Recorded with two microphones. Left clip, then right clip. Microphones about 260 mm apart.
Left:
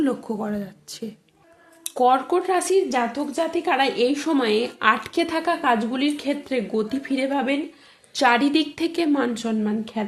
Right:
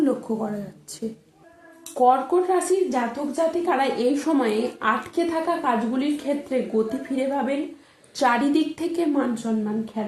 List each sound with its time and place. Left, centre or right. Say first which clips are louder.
0.0 s a woman's voice: right 1 dB; left